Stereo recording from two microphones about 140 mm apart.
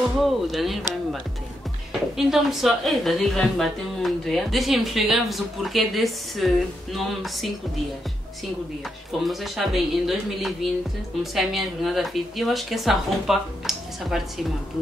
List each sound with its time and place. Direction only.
0.2 s a woman's voice: centre (ahead or behind)
2.1 s a woman's voice: centre (ahead or behind)
9.2 s a woman's voice: centre (ahead or behind)